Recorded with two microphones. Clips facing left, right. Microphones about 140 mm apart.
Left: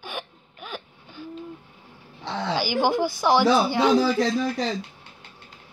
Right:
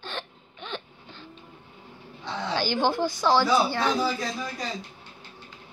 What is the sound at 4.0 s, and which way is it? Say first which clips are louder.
Speech: left 7 dB; 85° left.